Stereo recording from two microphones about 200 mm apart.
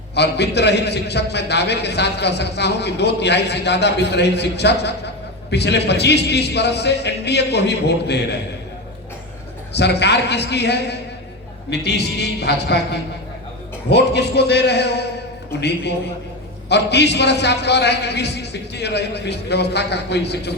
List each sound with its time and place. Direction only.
0.1 s a man's voice: 55° left (ahead or behind)
9.7 s a man's voice: 55° left (ahead or behind)